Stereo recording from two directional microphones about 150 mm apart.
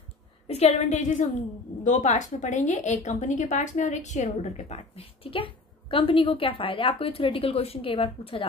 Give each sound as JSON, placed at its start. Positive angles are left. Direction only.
{"t": 0.5, "sound": "a woman's voice", "side_deg": 45}